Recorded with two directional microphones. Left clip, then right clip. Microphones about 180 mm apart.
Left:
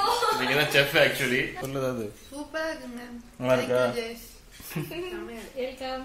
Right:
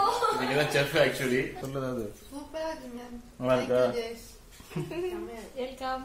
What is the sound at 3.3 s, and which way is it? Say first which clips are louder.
Speech: left 2 dB; 15° left (ahead or behind).